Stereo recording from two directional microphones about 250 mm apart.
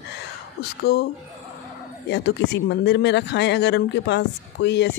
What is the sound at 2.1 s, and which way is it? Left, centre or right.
Speech, left.